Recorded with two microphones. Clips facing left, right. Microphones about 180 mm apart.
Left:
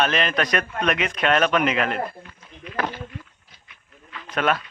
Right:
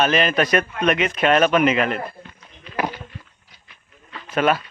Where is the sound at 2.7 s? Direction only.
30° right (ahead or behind).